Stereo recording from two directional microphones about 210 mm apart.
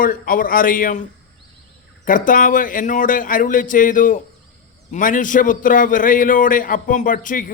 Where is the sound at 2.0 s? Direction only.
40° left (ahead or behind).